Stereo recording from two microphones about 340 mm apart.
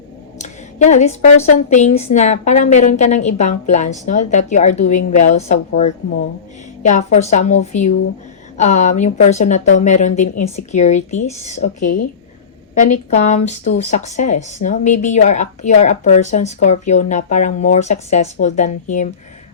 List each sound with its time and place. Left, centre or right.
0.4 s speech: left
12.7 s speech: left